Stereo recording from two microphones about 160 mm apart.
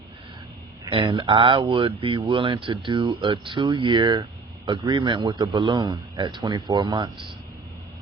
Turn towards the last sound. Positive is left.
turn(degrees=-30)  # may be behind; listen again after turning